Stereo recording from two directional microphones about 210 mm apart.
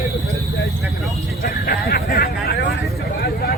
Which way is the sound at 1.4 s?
45° left (ahead or behind).